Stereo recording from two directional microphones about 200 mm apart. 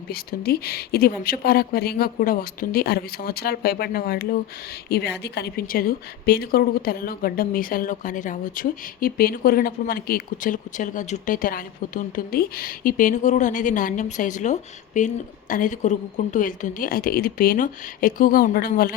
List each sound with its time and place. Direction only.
0.1 s a woman's voice: 50° left (ahead or behind)